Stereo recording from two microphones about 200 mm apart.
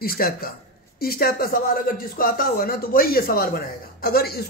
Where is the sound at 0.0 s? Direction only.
50° left (ahead or behind).